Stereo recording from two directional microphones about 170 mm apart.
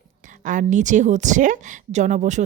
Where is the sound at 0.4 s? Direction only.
50° right (ahead or behind).